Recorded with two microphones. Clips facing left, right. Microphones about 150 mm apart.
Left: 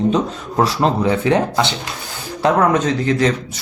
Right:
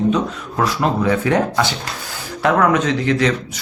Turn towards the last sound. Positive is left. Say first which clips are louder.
# left 1 dB
turn(degrees=35)  # may be behind; listen again after turning